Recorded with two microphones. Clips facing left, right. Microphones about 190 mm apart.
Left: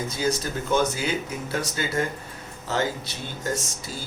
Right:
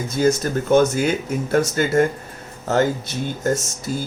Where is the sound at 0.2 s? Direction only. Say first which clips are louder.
Right 9 dB; 50° right (ahead or behind).